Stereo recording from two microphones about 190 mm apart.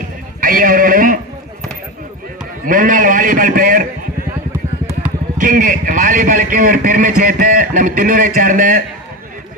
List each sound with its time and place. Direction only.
0.4 s a sound: 50° right (ahead or behind)
2.6 s a man's voice: 45° right (ahead or behind)
5.4 s a man's voice: 45° right (ahead or behind)